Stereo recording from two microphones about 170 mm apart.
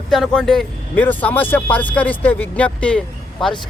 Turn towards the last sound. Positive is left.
turn(degrees=5)  # may be behind; listen again after turning